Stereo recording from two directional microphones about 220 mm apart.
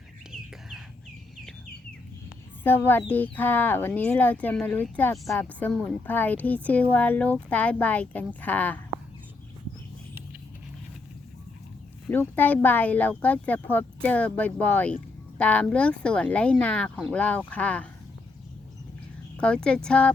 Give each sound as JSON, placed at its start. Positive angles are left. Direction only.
{"t": 2.6, "sound": "speech", "side_deg": 10}
{"t": 12.0, "sound": "speech", "side_deg": 10}
{"t": 19.4, "sound": "speech", "side_deg": 5}